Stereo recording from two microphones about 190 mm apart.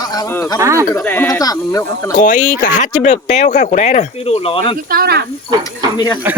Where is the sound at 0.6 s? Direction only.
15° right (ahead or behind).